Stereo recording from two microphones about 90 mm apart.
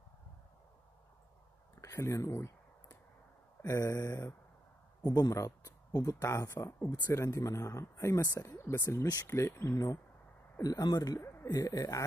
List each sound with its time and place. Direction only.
1.8 s a sound: 35° left (ahead or behind)
3.6 s speech: 40° left (ahead or behind)
8.5 s speech: 25° left (ahead or behind)
8.8 s speech: 35° left (ahead or behind)
10.6 s speech: 45° left (ahead or behind)